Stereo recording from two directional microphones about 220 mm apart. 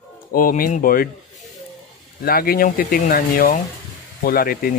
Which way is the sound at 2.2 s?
40° left (ahead or behind).